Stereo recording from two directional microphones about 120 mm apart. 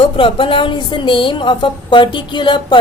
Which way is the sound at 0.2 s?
45° left (ahead or behind).